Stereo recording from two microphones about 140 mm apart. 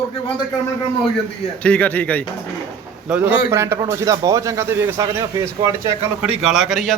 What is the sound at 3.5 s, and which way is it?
A man's voice, 20° right (ahead or behind).